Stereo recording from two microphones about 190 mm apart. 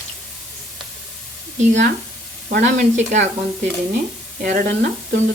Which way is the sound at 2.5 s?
45° right (ahead or behind).